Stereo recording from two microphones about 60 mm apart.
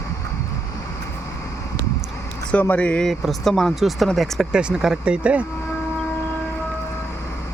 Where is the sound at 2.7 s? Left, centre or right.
Left.